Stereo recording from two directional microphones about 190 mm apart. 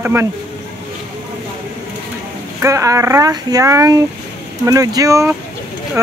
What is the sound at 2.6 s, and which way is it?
Speech, 15° right (ahead or behind).